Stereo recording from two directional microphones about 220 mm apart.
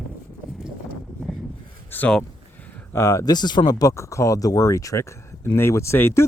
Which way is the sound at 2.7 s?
15° left (ahead or behind).